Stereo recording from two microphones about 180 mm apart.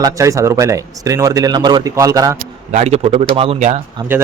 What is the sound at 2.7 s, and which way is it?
Speech, 35° right (ahead or behind).